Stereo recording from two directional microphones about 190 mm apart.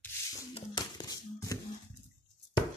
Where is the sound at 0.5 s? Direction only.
20° left (ahead or behind).